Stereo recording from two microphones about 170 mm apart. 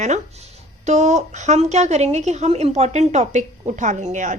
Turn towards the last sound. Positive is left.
turn(degrees=-45)  # may be behind; listen again after turning